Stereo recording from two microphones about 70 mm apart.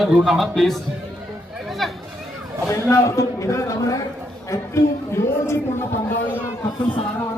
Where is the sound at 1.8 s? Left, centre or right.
Centre.